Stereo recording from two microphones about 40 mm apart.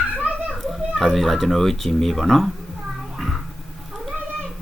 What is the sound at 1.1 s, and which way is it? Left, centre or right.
Speech, centre.